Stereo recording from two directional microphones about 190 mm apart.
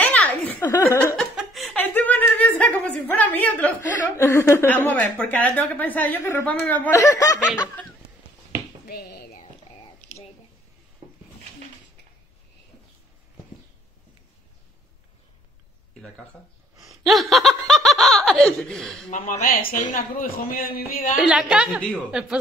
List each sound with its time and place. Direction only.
0.0 s a sound: 10° left (ahead or behind)
1.1 s chuckle: centre (ahead or behind)
5.2 s speech: 10° left (ahead or behind)
8.8 s a sound: 55° left (ahead or behind)
16.9 s laughter: centre (ahead or behind)
19.0 s a man's voice: 40° left (ahead or behind)
21.2 s a woman's voice: 5° right (ahead or behind)